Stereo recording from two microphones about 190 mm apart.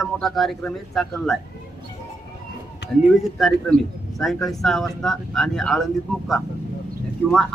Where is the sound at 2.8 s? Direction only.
60° left (ahead or behind).